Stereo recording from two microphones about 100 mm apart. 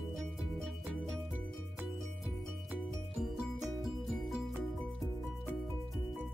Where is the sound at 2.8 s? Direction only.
Centre (ahead or behind).